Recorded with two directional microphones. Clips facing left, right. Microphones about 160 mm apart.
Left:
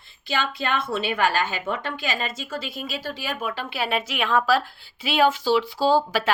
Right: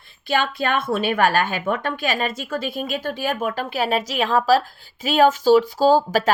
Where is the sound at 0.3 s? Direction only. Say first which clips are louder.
Right 4 dB; 50° right (ahead or behind).